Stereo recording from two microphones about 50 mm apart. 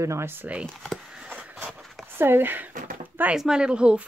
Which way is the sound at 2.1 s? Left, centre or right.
Right.